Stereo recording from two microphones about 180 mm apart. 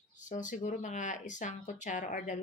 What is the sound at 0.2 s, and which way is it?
Speech, 45° left (ahead or behind).